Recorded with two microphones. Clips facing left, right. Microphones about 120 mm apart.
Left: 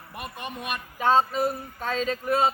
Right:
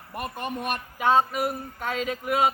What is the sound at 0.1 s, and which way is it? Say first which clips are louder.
Speech: right 5 dB; 45° right (ahead or behind).